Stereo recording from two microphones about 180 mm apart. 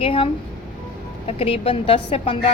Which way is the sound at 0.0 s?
30° left (ahead or behind).